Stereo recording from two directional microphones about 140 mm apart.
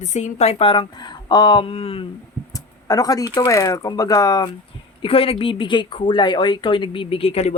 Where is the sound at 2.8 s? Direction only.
25° left (ahead or behind).